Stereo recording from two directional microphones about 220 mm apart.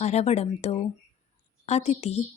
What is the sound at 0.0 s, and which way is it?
Speech, 30° left (ahead or behind).